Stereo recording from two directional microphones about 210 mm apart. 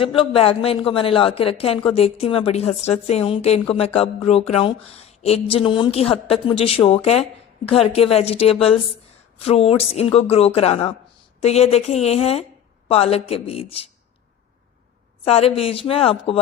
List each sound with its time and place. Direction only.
0.0 s a woman's voice: 25° left (ahead or behind)
15.2 s a woman's voice: 30° left (ahead or behind)